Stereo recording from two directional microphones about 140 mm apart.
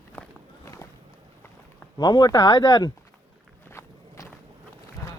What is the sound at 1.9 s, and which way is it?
Speech, 30° left (ahead or behind).